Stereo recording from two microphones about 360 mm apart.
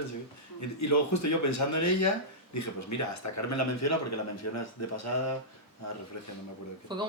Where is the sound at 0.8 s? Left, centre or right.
Left.